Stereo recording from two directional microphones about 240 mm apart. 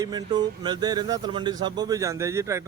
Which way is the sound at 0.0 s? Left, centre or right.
Centre.